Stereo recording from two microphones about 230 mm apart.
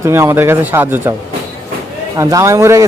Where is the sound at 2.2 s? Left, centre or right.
Centre.